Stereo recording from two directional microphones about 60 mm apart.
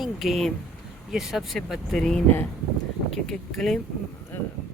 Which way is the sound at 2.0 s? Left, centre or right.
Centre.